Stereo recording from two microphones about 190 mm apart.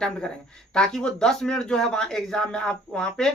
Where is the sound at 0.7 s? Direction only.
5° left (ahead or behind).